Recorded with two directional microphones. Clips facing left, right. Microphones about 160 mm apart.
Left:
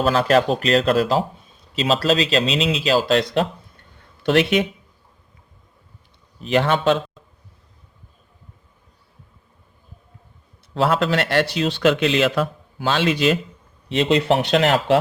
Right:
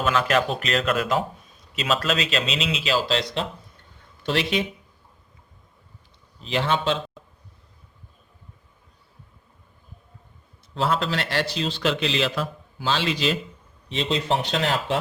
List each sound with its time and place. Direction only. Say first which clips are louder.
0.0 s speech: left 5 dB; 35° left (ahead or behind); by 3.4 s 55° left (ahead or behind)
4.2 s speech: left 7 dB; 65° left (ahead or behind)
6.4 s a man's voice: left 6 dB; 55° left (ahead or behind)
10.8 s a man's voice: left 5 dB; 60° left (ahead or behind); by 14.9 s 80° left